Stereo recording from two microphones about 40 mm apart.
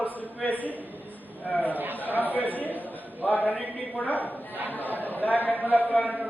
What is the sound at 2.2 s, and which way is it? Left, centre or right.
A man's voice, left.